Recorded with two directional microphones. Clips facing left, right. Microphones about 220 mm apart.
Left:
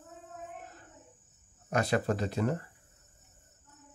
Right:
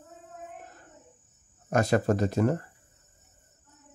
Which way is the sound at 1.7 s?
45° right (ahead or behind).